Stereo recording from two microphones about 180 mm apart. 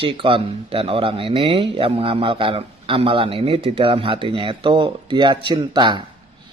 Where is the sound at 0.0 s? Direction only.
30° right (ahead or behind).